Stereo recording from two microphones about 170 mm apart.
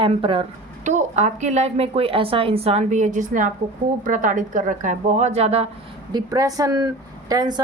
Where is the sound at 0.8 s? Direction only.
45° right (ahead or behind).